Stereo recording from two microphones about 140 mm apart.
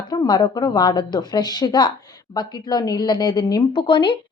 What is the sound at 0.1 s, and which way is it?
A woman's voice, 30° left (ahead or behind).